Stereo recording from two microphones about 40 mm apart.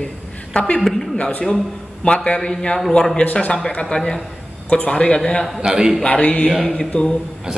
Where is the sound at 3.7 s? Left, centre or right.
Centre.